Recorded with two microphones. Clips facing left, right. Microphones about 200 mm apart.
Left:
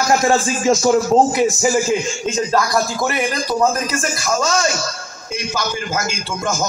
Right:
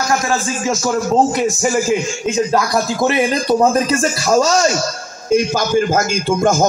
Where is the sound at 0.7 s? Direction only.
15° left (ahead or behind).